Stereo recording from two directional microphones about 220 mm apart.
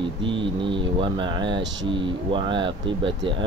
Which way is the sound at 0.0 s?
20° right (ahead or behind).